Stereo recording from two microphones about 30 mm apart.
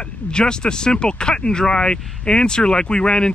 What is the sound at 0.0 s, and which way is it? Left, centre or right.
Speech, left.